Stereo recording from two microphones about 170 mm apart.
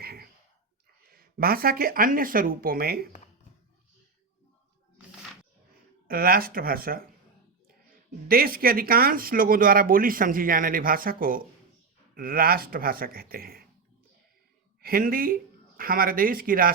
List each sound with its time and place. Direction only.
0.0 s a sound: 65° right (ahead or behind)
1.0 s speech: 60° right (ahead or behind)
6.1 s speech: 60° right (ahead or behind)
14.8 s speech: 60° right (ahead or behind)